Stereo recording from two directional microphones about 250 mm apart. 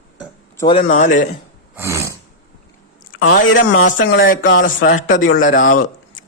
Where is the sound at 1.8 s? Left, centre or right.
Centre.